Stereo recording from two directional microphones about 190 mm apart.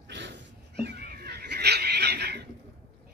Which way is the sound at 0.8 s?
55° right (ahead or behind).